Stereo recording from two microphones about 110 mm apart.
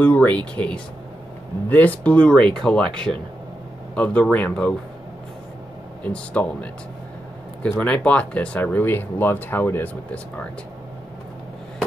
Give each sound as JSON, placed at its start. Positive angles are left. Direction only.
{"t": 0.0, "sound": "speech", "side_deg": 15}
{"t": 6.0, "sound": "speech", "side_deg": 10}
{"t": 7.8, "sound": "speech", "side_deg": 10}